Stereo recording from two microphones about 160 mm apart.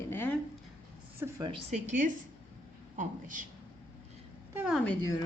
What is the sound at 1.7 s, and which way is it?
Speech, 50° right (ahead or behind).